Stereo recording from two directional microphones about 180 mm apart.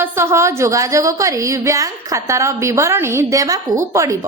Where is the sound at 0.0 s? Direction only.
15° right (ahead or behind).